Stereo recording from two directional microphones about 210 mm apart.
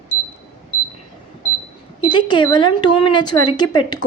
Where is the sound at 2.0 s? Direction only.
20° left (ahead or behind).